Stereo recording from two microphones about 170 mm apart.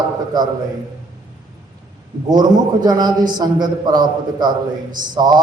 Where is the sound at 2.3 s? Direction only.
25° right (ahead or behind).